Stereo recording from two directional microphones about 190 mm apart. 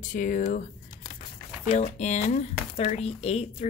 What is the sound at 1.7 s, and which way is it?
Speech, 40° left (ahead or behind).